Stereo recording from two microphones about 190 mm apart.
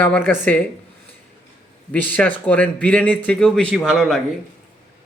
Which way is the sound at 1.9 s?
10° left (ahead or behind).